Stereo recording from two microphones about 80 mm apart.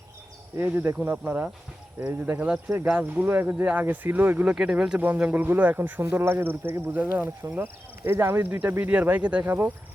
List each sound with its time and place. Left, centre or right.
0.5 s speech: right
4.5 s speech: centre